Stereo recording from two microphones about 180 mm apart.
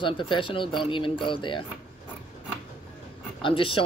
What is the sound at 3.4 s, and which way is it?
Speech, 30° left (ahead or behind).